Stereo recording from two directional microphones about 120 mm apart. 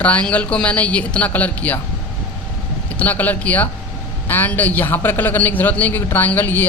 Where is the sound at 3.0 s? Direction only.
15° left (ahead or behind).